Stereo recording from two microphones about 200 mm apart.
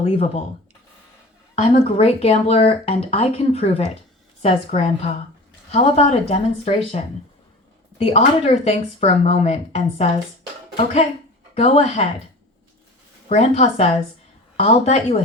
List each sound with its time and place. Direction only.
0.0 s speech: 30° left (ahead or behind)
1.5 s speech: 30° left (ahead or behind)
11.5 s speech: 35° left (ahead or behind)
13.2 s speech: 35° left (ahead or behind)